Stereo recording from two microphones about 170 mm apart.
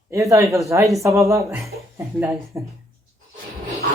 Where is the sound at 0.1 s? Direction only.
20° right (ahead or behind).